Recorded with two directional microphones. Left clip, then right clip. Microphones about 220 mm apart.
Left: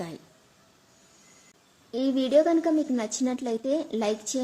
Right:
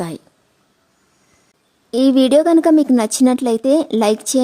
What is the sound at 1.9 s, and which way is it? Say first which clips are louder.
A woman's voice: right 10 dB; 50° right (ahead or behind).